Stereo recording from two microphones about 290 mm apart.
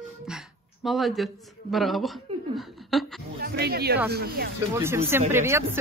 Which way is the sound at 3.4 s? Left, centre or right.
Right.